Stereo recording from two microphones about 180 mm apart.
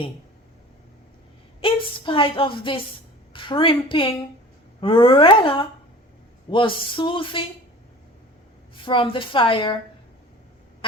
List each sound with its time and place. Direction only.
1.6 s a woman's voice: 30° left (ahead or behind)
8.7 s a woman's voice: 25° left (ahead or behind)